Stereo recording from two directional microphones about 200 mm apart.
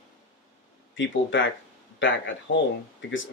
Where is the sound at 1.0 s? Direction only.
65° left (ahead or behind).